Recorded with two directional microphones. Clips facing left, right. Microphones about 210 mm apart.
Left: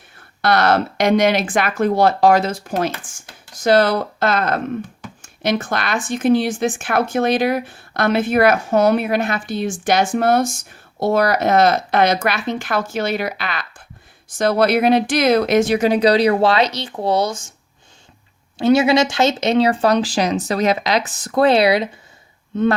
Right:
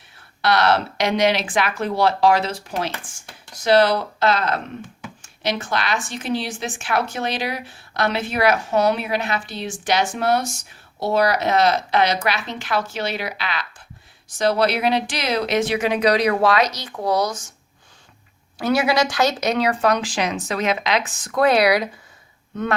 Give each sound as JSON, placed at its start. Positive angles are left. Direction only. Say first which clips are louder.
{"t": 0.4, "sound": "a woman's voice", "louder": "left 2 dB", "side_deg": 50}
{"t": 18.5, "sound": "speech", "louder": "left 5 dB", "side_deg": 25}